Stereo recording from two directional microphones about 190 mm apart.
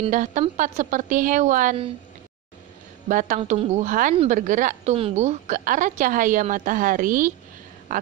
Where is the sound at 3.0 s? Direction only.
45° right (ahead or behind).